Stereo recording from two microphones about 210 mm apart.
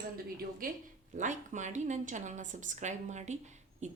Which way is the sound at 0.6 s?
45° right (ahead or behind).